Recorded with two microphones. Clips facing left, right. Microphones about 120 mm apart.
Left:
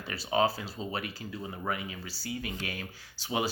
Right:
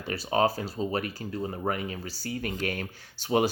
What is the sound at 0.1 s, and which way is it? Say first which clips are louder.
Speech: right 3 dB; 40° right (ahead or behind).